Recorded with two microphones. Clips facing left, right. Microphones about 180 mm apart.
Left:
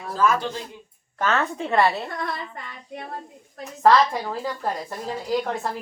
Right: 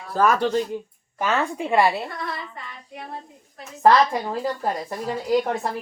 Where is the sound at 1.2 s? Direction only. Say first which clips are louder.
Even; 10° right (ahead or behind).